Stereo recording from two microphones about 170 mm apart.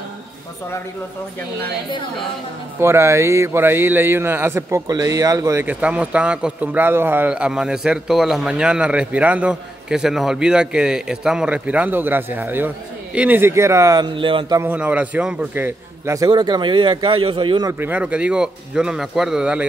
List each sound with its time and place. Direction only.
2.8 s a man's voice: 15° right (ahead or behind)
14.6 s a man's voice: 10° right (ahead or behind); by 17.6 s 30° right (ahead or behind)
17.6 s a man's voice: 10° right (ahead or behind)